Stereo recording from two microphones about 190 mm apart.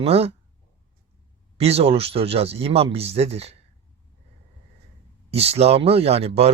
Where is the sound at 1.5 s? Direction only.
30° right (ahead or behind).